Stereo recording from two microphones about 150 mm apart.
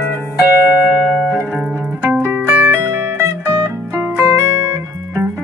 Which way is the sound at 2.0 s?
10° right (ahead or behind).